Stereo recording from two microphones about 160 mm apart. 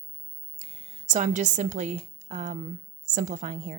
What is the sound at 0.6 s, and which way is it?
A woman's voice, 40° right (ahead or behind).